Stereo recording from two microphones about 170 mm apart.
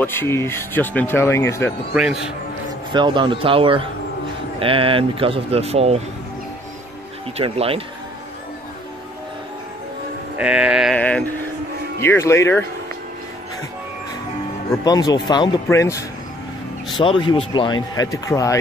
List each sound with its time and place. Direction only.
0.0 s speech: 15° left (ahead or behind)
2.9 s speech: 25° right (ahead or behind)
7.3 s speech: 35° right (ahead or behind)
10.3 s music: 5° right (ahead or behind)
11.0 s speech: 10° left (ahead or behind)
14.9 s speech: 20° left (ahead or behind)
16.9 s speech: 30° left (ahead or behind)